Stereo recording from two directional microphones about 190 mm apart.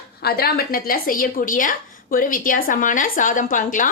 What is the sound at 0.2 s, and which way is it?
A woman's voice, 55° left (ahead or behind).